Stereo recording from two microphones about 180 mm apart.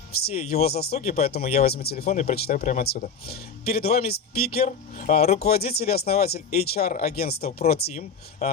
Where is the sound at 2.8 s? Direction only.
60° left (ahead or behind).